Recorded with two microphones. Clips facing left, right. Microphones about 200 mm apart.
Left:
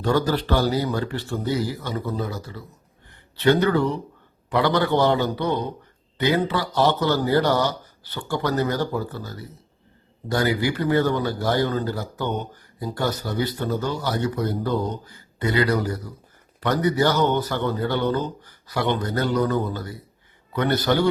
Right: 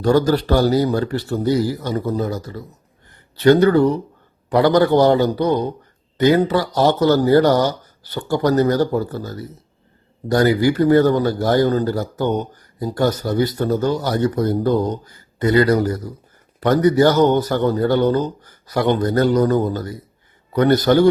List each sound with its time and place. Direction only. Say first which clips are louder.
0.0 s a man's voice: right 6 dB; 40° right (ahead or behind)